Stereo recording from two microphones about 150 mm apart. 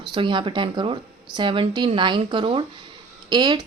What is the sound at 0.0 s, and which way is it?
A woman's voice, 35° right (ahead or behind).